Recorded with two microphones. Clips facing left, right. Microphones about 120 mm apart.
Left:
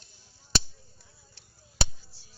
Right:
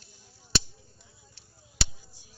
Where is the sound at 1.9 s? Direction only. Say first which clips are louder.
Right 3 dB; 15° right (ahead or behind).